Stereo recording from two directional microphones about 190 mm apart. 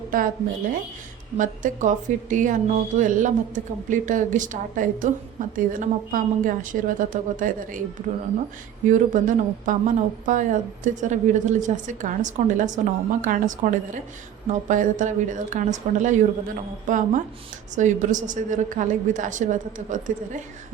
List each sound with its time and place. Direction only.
0.1 s a woman's voice: 45° right (ahead or behind)
1.4 s a woman's voice: 40° right (ahead or behind)
8.9 s a woman's voice: 40° right (ahead or behind)